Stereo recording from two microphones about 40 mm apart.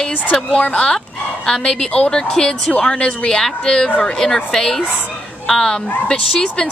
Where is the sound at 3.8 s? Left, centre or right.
Left.